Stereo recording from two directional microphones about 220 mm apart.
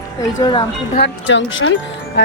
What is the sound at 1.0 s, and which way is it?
Speech, 55° left (ahead or behind).